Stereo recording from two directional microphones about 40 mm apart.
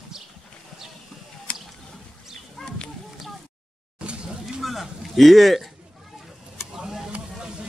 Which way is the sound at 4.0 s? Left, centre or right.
Right.